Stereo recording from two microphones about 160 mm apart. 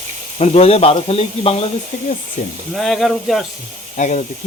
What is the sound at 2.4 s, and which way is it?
Speech, 50° left (ahead or behind).